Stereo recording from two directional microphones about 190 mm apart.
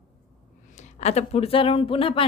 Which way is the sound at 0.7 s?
35° left (ahead or behind).